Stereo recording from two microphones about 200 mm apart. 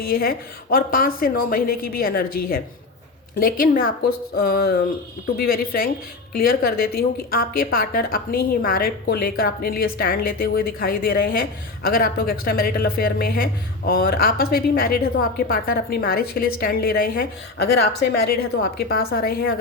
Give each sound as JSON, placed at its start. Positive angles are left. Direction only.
{"t": 0.0, "sound": "a woman's voice", "side_deg": 50}